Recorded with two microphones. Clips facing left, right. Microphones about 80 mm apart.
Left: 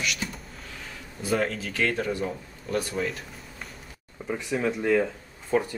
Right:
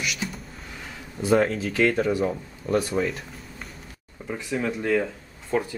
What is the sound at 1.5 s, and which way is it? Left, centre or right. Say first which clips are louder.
Speech: right 6 dB; centre.